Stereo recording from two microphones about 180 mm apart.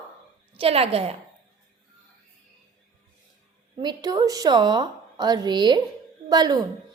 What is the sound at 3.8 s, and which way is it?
A woman's voice, 25° right (ahead or behind).